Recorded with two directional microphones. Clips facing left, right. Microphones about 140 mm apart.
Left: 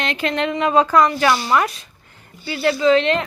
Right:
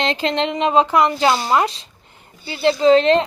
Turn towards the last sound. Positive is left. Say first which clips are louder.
# right 3 dB
turn(degrees=-35)  # may be behind; listen again after turning